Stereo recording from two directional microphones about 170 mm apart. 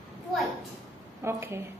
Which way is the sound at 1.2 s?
15° right (ahead or behind).